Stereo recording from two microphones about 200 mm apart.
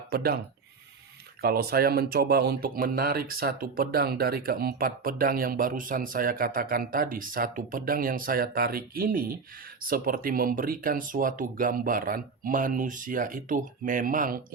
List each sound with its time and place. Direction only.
0.1 s speech: 50° right (ahead or behind)
1.4 s speech: 50° right (ahead or behind)